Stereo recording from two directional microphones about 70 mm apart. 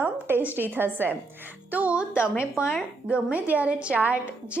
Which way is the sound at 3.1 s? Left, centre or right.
Right.